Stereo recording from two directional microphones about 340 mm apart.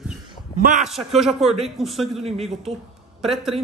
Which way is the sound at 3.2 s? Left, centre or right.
Centre.